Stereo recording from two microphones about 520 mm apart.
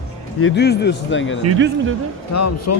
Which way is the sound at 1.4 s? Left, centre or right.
Right.